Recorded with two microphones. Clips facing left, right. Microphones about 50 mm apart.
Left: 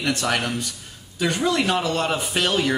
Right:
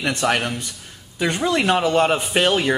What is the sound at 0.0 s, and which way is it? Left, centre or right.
Speech, right.